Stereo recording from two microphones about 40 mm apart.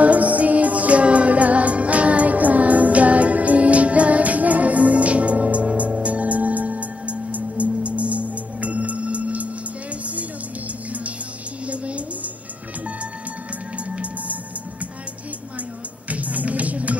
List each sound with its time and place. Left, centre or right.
0.0 s music: right
11.6 s music: right
13.8 s music: right
16.1 s music: right